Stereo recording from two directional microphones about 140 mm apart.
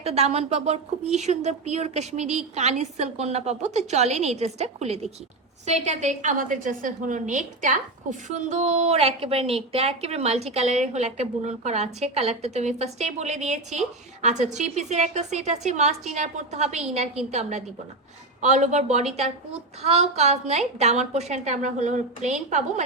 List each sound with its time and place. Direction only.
0.0 s a woman's voice: 50° right (ahead or behind)
18.4 s a woman's voice: 60° right (ahead or behind)